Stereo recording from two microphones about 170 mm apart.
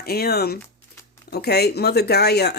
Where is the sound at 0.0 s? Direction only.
65° left (ahead or behind).